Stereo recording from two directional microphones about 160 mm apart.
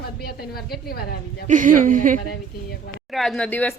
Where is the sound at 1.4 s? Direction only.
55° right (ahead or behind).